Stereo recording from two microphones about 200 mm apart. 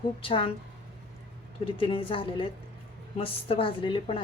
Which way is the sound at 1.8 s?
25° left (ahead or behind).